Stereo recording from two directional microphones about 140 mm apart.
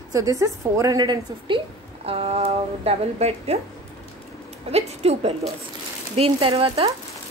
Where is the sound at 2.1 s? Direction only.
45° right (ahead or behind).